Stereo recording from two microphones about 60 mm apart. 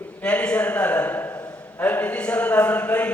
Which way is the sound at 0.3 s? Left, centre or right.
Centre.